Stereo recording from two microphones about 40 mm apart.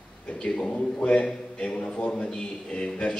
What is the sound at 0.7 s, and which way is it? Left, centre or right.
A man's voice, left.